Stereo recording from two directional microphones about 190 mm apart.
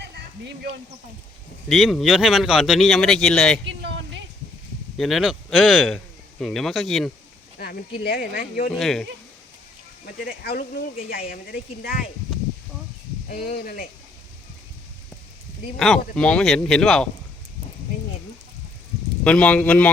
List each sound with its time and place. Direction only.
0.0 s a sound: 60° right (ahead or behind)
1.7 s speech: centre (ahead or behind)
3.7 s a sound: 75° right (ahead or behind)
4.9 s speech: centre (ahead or behind)
7.6 s speech: 50° left (ahead or behind)
8.7 s speech: centre (ahead or behind)
10.2 s speech: 50° left (ahead or behind)
13.2 s speech: 55° left (ahead or behind)
15.8 s speech: 5° left (ahead or behind)
19.2 s a man's voice: 5° left (ahead or behind)